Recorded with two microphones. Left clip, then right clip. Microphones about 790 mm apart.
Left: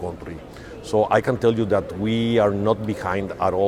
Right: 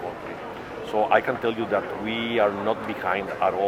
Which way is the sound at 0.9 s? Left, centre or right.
Left.